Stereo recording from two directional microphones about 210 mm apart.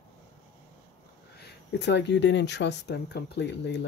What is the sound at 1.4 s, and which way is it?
Speech, 55° left (ahead or behind).